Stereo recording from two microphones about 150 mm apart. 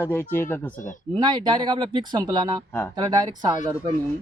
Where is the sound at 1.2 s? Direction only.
30° right (ahead or behind).